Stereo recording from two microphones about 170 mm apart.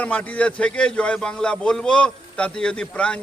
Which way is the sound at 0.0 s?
10° left (ahead or behind).